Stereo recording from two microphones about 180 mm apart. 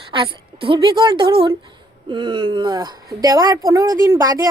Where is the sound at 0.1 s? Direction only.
30° right (ahead or behind).